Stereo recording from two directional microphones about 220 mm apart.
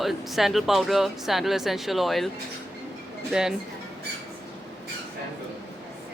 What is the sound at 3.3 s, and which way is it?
Speech, 5° right (ahead or behind).